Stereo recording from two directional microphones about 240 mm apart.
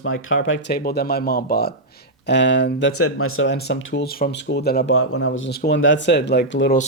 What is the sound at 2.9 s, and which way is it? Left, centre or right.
Speech, left.